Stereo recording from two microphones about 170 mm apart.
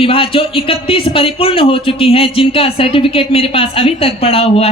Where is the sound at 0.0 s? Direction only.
30° left (ahead or behind).